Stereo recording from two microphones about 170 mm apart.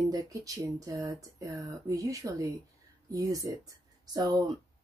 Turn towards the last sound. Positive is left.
turn(degrees=-25)  # may be behind; listen again after turning